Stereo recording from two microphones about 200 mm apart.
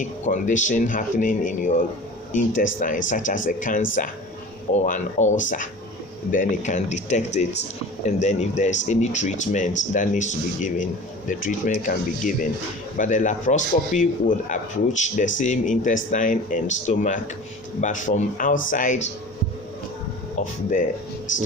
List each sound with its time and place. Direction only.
0.0 s speech: 40° left (ahead or behind)
20.4 s speech: 40° left (ahead or behind)